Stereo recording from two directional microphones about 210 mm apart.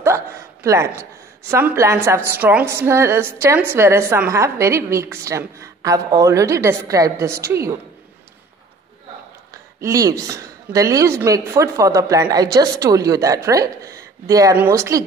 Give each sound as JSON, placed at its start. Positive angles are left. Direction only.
{"t": 0.7, "sound": "a woman's voice", "side_deg": -15}
{"t": 9.8, "sound": "a woman's voice", "side_deg": -15}